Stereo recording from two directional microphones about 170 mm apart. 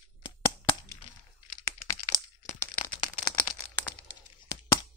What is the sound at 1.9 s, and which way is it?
Crack, 25° left (ahead or behind).